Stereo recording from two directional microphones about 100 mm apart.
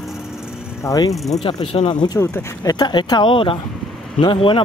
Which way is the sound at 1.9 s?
45° left (ahead or behind).